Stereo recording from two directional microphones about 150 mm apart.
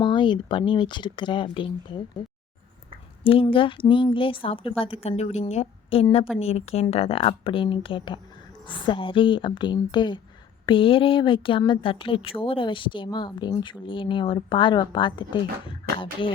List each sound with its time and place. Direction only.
0.0 s speech: 30° left (ahead or behind)
3.2 s a woman's voice: 35° left (ahead or behind)